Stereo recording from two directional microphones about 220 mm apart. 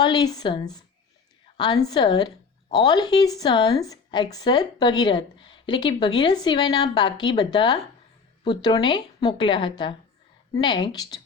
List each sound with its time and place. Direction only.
0.0 s a woman's voice: 20° left (ahead or behind)